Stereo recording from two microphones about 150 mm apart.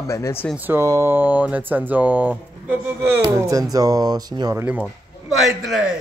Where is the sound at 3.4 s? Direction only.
20° right (ahead or behind).